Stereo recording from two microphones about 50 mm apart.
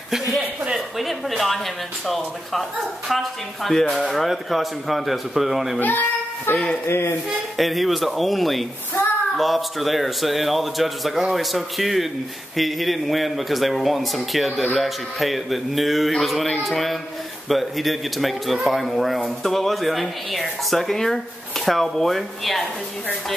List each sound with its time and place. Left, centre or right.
0.7 s a woman's voice: centre
5.8 s a child's voice: left
6.5 s speech: centre
6.9 s speech: left
7.5 s a man's voice: centre